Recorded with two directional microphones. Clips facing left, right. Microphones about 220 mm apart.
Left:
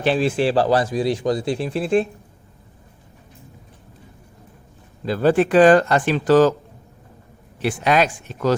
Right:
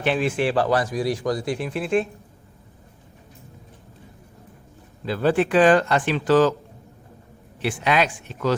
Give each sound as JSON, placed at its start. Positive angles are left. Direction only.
{"t": 0.0, "sound": "speech", "side_deg": 35}
{"t": 5.0, "sound": "speech", "side_deg": 40}
{"t": 7.6, "sound": "speech", "side_deg": 40}